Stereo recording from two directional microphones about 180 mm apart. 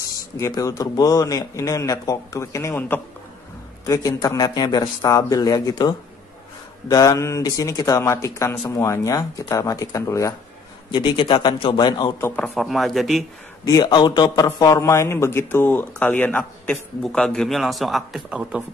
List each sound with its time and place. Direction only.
0.4 s a man's voice: 20° left (ahead or behind)
12.3 s speech: 5° left (ahead or behind)
13.7 s a man's voice: 20° left (ahead or behind); by 18.6 s 5° right (ahead or behind)